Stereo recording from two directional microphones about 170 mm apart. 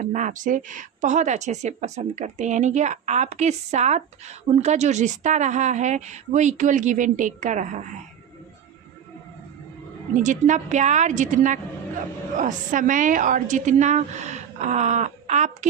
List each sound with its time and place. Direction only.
0.0 s speech: 50° right (ahead or behind)
10.2 s speech: 45° right (ahead or behind)